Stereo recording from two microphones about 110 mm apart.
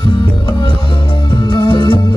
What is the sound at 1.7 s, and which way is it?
Music, 50° left (ahead or behind).